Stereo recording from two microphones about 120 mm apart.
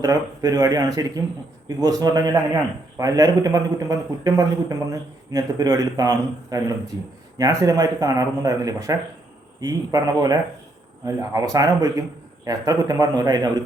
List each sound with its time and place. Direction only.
0.0 s a man's voice: 30° right (ahead or behind)